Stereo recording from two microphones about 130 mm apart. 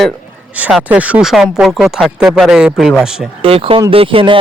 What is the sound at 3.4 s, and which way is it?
Speech, 45° right (ahead or behind).